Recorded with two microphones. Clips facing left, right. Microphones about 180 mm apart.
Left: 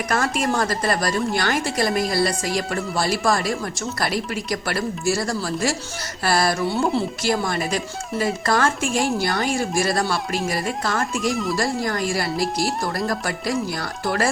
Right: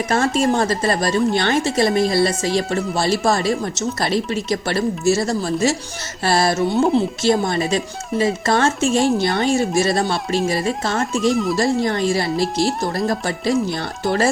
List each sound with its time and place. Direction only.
0.1 s speech: 25° right (ahead or behind)